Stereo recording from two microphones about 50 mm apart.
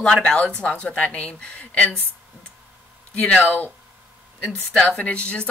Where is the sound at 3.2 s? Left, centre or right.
Left.